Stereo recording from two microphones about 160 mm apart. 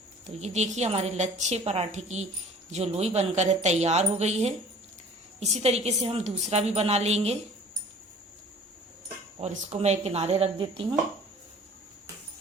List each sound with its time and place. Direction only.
0.3 s a woman's voice: 45° right (ahead or behind)
9.4 s a woman's voice: 45° right (ahead or behind)